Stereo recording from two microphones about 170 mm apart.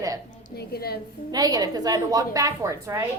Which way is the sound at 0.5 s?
65° left (ahead or behind).